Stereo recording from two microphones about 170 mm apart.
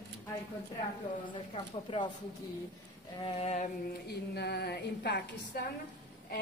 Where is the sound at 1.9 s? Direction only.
30° left (ahead or behind).